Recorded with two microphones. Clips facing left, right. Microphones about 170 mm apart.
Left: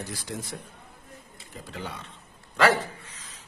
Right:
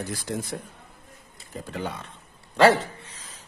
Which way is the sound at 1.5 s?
45° right (ahead or behind).